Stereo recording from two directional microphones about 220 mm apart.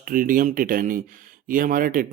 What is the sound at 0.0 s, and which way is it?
Speech, 40° right (ahead or behind).